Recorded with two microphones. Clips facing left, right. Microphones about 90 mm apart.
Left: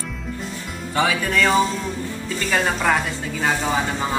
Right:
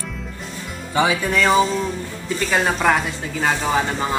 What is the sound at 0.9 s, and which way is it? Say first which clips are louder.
Music: right 2 dB; 15° right (ahead or behind).